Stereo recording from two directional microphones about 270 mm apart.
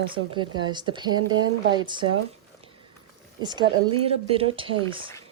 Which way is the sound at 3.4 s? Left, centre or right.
Centre.